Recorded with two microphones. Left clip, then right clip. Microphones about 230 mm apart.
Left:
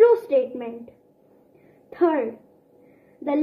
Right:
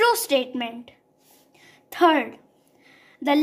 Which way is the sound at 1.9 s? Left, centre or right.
Right.